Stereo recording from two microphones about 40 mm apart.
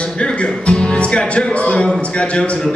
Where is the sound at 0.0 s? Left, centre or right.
Left.